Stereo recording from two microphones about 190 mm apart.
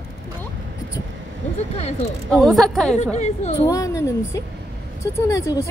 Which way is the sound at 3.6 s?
15° left (ahead or behind).